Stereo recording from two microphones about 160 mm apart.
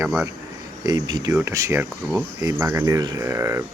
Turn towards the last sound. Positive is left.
turn(degrees=-15)  # may be behind; listen again after turning